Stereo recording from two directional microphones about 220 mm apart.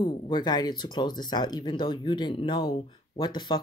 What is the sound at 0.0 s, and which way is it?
Speech, 20° left (ahead or behind).